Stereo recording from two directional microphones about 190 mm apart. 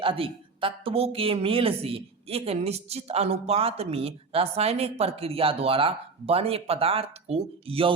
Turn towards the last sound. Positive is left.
turn(degrees=-30)  # may be behind; listen again after turning